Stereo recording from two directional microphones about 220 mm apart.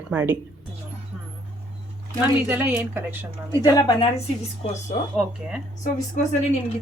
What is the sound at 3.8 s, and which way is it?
Speech, 20° left (ahead or behind).